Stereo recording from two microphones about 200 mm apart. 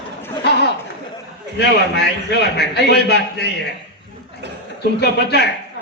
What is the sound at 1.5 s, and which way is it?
A man's voice, 55° left (ahead or behind).